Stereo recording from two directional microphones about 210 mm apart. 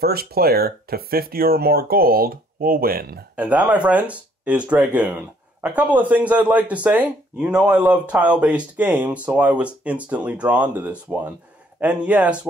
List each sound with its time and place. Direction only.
0.0 s speech: 45° right (ahead or behind)
3.3 s speech: 5° right (ahead or behind)